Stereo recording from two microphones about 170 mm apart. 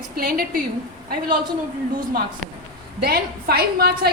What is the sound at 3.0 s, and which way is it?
A woman's voice, 65° right (ahead or behind).